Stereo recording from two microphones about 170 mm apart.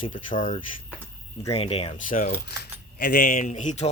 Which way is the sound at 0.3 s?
50° left (ahead or behind).